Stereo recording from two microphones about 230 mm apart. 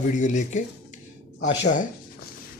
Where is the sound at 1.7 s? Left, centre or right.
Left.